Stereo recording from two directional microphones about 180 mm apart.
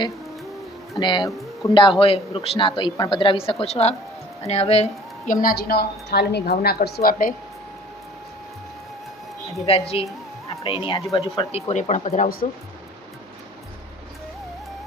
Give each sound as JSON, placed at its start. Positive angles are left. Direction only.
{"t": 0.9, "sound": "a woman's voice", "side_deg": 25}
{"t": 5.3, "sound": "a woman's voice", "side_deg": 50}
{"t": 9.6, "sound": "speech", "side_deg": 35}